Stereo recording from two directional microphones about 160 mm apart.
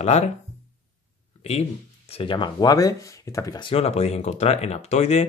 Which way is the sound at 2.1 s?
35° left (ahead or behind).